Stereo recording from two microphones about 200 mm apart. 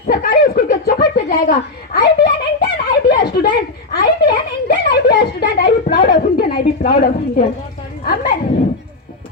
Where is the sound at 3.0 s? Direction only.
50° left (ahead or behind).